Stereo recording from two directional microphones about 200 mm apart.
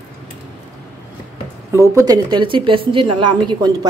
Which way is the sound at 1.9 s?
20° right (ahead or behind).